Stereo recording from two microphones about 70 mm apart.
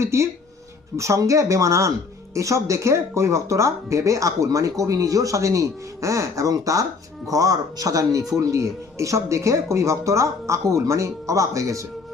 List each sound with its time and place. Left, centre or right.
0.0 s speech: right